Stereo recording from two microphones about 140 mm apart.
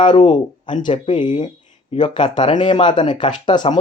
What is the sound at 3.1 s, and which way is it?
Speech, 35° left (ahead or behind).